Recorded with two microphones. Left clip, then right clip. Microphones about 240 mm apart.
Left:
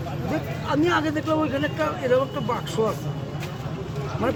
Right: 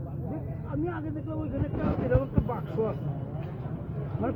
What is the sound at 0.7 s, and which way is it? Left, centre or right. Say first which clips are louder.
Speech: left 12 dB; left.